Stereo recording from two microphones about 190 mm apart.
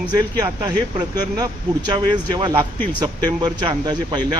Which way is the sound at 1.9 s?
25° right (ahead or behind).